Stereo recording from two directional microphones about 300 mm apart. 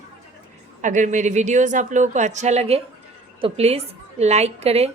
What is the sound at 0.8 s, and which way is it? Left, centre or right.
Speech, right.